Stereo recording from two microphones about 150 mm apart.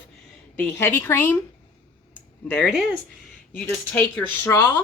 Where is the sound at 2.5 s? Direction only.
5° left (ahead or behind).